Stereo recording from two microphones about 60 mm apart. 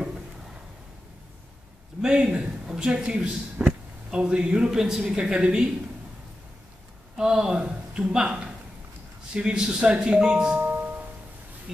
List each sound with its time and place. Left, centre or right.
2.0 s speech: centre
7.2 s speech: centre
10.6 s music: right